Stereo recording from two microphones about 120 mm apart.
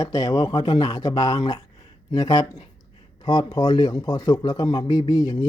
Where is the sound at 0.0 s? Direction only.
30° left (ahead or behind).